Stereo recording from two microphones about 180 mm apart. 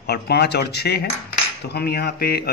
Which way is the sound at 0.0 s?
65° left (ahead or behind).